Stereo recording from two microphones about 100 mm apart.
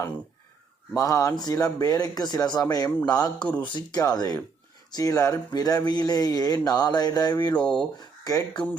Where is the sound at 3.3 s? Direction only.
10° left (ahead or behind).